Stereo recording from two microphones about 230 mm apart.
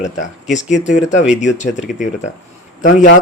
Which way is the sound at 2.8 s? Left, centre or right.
Left.